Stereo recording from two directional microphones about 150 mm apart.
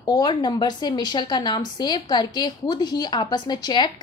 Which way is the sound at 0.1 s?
30° left (ahead or behind).